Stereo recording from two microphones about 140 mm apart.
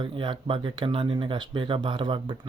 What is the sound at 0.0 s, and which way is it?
Speech, 35° right (ahead or behind).